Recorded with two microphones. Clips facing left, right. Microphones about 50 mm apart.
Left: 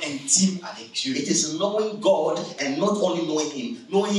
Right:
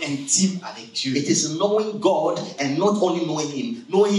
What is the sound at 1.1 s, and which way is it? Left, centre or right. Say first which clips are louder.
Speech: right 3 dB; right.